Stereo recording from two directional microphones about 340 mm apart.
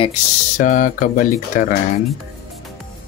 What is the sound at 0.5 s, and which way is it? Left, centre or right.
Speech, left.